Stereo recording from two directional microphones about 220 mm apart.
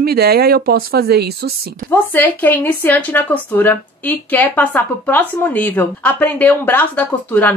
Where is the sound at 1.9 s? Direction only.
10° left (ahead or behind).